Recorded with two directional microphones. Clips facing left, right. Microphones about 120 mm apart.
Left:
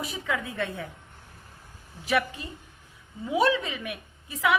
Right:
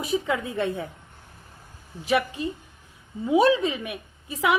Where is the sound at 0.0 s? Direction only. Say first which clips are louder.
Right 6 dB; 25° right (ahead or behind).